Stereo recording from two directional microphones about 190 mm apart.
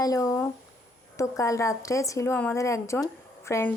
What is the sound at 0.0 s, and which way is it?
A woman's voice, 20° left (ahead or behind).